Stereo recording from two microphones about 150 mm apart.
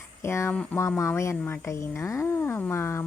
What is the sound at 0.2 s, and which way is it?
A woman's voice, 20° left (ahead or behind).